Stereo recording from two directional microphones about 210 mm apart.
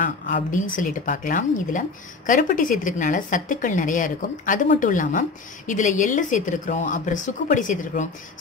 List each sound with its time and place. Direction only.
0.0 s speech: 40° left (ahead or behind)